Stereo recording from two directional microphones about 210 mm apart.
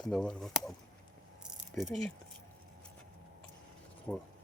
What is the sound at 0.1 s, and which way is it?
Speech, centre (ahead or behind).